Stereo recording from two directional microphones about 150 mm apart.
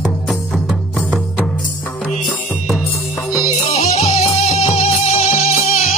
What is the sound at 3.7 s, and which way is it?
Music, 40° left (ahead or behind).